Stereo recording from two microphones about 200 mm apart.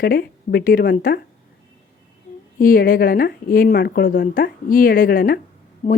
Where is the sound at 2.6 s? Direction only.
45° left (ahead or behind).